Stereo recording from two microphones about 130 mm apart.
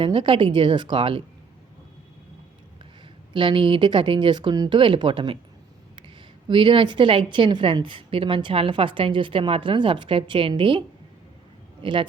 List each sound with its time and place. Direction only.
0.0 s a woman's voice: 40° right (ahead or behind)
3.3 s a woman's voice: 40° right (ahead or behind)
6.5 s a woman's voice: 40° right (ahead or behind)